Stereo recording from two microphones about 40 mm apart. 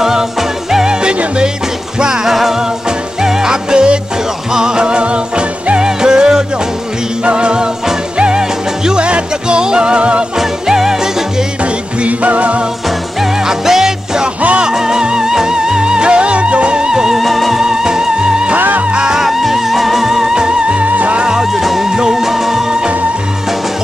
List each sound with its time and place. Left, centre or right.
0.0 s music: centre
2.0 s music: centre
10.3 s music: centre
11.6 s music: right
13.2 s music: centre
17.2 s music: centre
17.6 s music: centre
18.6 s music: right
18.9 s music: right
19.1 s music: centre; by 20.9 s right
20.9 s music: right
21.2 s music: centre